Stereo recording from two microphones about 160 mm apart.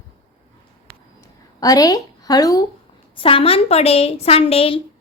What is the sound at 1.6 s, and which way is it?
Speech, 25° left (ahead or behind).